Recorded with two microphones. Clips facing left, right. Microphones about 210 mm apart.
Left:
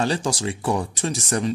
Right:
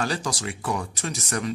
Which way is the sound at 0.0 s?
25° left (ahead or behind).